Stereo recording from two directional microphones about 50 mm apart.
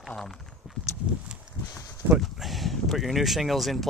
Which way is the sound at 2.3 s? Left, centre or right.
Centre.